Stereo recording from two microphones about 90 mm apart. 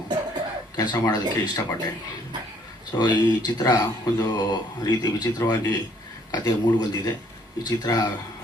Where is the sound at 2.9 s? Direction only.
50° left (ahead or behind).